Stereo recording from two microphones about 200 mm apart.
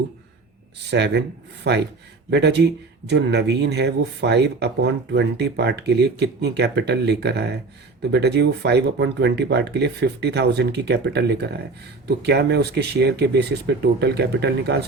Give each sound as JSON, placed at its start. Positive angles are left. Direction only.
{"t": 0.9, "sound": "speech", "side_deg": -60}